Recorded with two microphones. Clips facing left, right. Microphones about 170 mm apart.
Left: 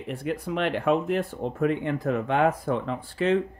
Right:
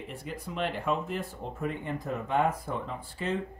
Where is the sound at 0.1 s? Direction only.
70° left (ahead or behind).